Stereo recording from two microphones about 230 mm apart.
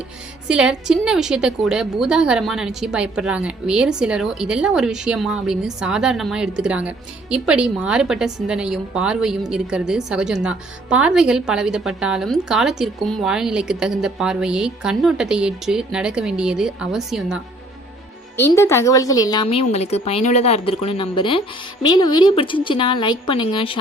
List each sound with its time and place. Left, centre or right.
0.4 s a woman's voice: centre
18.3 s a woman's voice: centre